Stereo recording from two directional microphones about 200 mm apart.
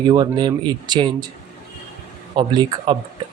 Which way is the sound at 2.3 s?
20° right (ahead or behind).